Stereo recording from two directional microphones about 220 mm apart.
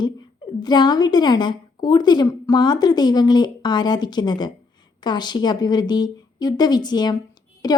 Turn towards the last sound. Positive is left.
turn(degrees=20)  # may be behind; listen again after turning